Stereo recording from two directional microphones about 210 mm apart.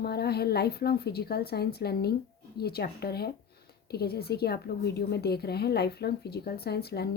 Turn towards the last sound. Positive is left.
turn(degrees=50)  # may be behind; listen again after turning